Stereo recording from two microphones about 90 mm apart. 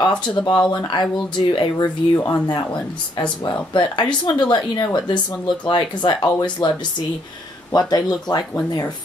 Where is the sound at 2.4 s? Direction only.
55° left (ahead or behind).